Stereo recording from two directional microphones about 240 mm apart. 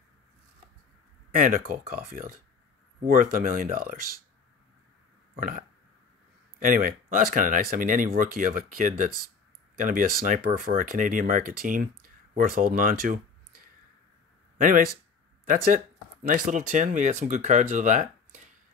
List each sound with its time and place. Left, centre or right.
1.3 s speech: right
5.3 s burping: right
6.6 s speech: right
15.5 s speech: right